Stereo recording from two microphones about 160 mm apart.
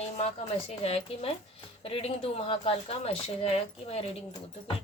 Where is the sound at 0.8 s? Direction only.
35° left (ahead or behind).